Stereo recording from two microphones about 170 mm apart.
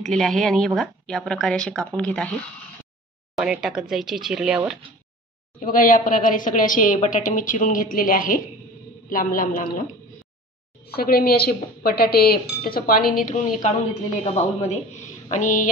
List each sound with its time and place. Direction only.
0.0 s a woman's voice: centre (ahead or behind)
3.3 s a woman's voice: 5° right (ahead or behind)
5.6 s a woman's voice: 55° left (ahead or behind)
10.9 s a man's voice: 65° left (ahead or behind); by 15.7 s 45° left (ahead or behind)